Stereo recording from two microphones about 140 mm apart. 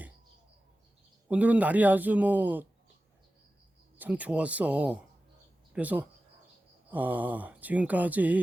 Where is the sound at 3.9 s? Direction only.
10° right (ahead or behind).